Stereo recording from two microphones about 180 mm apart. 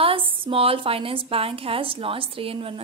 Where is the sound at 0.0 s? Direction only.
30° right (ahead or behind).